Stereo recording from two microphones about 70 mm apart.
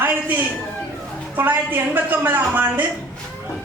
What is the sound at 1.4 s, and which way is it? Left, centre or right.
A man's voice, right.